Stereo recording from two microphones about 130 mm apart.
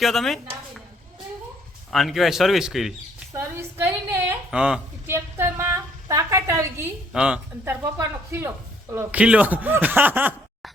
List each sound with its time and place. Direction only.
0.0 s speech: centre (ahead or behind)
1.9 s speech: centre (ahead or behind)
3.8 s a sound: 20° right (ahead or behind)
4.5 s speech: 5° right (ahead or behind)
5.0 s a woman's voice: 20° right (ahead or behind)
7.1 s speech: 5° right (ahead or behind)
7.6 s speech: 20° right (ahead or behind)